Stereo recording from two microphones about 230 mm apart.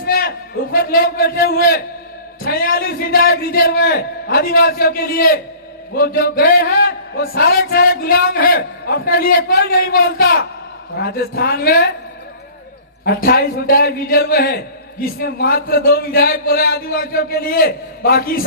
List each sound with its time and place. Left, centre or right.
0.0 s a man's voice: left
13.2 s a man's voice: left